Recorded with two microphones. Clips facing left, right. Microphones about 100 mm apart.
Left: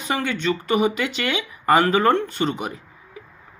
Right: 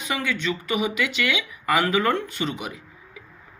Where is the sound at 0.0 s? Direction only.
40° left (ahead or behind).